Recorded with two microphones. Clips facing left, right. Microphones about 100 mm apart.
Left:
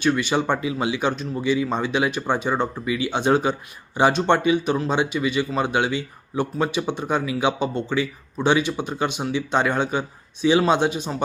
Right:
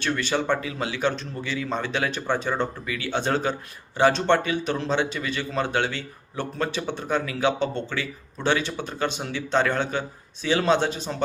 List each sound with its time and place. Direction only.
0.0 s speech: 15° left (ahead or behind)